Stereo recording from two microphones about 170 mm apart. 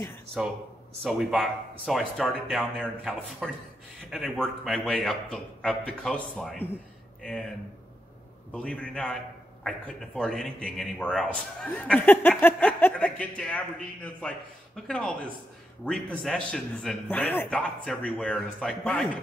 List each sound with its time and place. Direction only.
1.0 s a man's voice: centre (ahead or behind)
8.5 s a man's voice: 5° left (ahead or behind)